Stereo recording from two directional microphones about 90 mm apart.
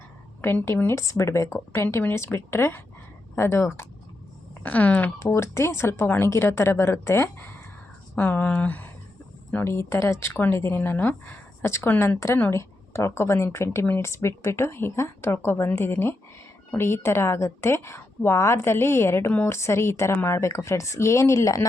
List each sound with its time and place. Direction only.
0.4 s speech: 25° left (ahead or behind)
4.6 s speech: 15° left (ahead or behind)
5.2 s speech: 30° left (ahead or behind)